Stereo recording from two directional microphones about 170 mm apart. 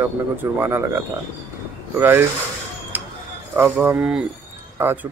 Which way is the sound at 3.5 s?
15° right (ahead or behind).